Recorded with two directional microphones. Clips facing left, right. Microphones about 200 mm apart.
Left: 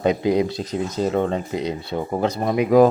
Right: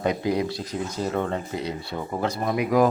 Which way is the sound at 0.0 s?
20° left (ahead or behind).